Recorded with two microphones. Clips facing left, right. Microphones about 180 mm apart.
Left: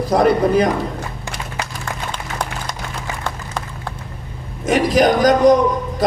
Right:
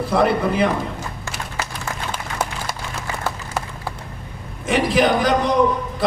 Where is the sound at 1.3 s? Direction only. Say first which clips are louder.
Left 1 dB; 5° right (ahead or behind).